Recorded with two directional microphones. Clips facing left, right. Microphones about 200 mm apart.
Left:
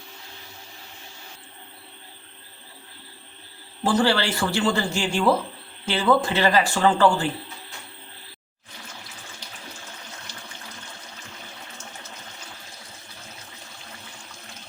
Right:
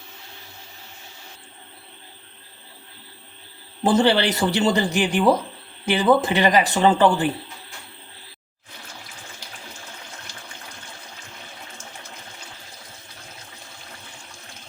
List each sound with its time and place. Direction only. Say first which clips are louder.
3.8 s speech: right 3 dB; 20° right (ahead or behind)